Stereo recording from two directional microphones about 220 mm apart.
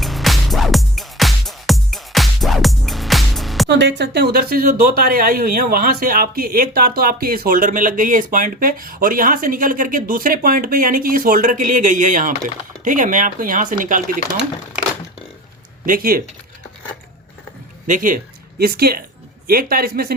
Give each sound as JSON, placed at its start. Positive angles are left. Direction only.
{"t": 0.0, "sound": "music", "side_deg": 0}
{"t": 3.7, "sound": "speech", "side_deg": -50}
{"t": 15.9, "sound": "a man's voice", "side_deg": -40}
{"t": 17.8, "sound": "a man's voice", "side_deg": -35}